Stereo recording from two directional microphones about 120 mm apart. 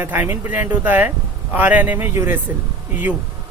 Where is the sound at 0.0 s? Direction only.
15° right (ahead or behind).